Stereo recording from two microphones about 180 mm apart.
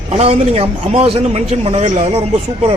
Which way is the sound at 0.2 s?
35° right (ahead or behind).